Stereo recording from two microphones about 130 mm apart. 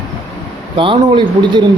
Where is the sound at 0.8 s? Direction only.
40° right (ahead or behind).